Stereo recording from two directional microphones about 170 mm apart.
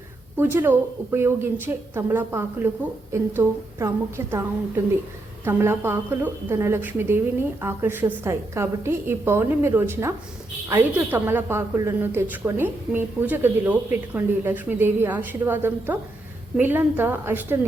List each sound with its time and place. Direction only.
0.3 s a woman's voice: 15° right (ahead or behind)
5.5 s a woman's voice: 15° right (ahead or behind)